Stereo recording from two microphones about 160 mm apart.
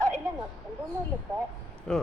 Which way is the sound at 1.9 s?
5° left (ahead or behind).